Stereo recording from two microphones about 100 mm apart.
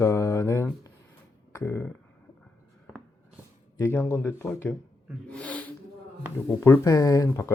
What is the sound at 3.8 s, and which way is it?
Speech, 25° left (ahead or behind).